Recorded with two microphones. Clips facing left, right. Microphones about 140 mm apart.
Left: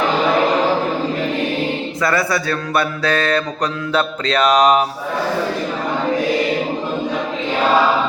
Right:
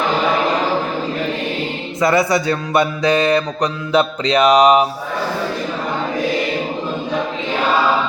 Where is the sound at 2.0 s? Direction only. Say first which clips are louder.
Right 5 dB; 20° right (ahead or behind).